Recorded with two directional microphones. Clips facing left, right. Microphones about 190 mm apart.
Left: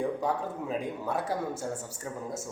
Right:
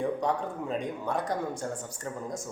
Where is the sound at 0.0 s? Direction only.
Centre (ahead or behind).